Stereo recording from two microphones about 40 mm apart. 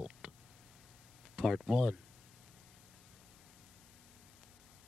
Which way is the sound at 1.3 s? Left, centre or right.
Centre.